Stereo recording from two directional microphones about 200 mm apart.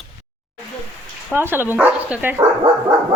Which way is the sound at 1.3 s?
10° right (ahead or behind).